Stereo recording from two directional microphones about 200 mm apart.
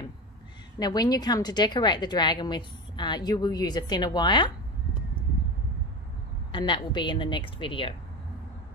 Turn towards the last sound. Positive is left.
turn(degrees=25)  # may be behind; listen again after turning